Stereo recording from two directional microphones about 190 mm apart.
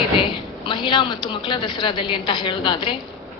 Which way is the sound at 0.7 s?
25° left (ahead or behind).